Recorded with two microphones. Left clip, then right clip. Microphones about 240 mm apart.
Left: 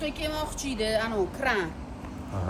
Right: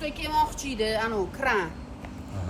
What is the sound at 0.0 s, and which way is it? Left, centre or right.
Speech, centre.